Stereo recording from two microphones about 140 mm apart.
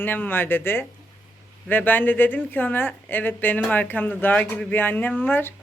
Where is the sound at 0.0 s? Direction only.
15° left (ahead or behind).